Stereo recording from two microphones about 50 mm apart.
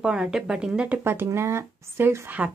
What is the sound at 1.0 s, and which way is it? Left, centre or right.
Speech, right.